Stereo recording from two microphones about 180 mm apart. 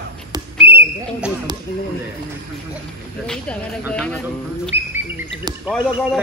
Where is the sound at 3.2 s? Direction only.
5° left (ahead or behind).